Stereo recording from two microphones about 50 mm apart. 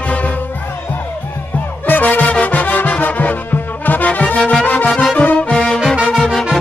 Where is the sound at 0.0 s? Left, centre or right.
Left.